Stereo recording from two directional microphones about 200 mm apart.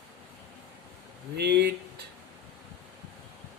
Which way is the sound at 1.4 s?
55° right (ahead or behind).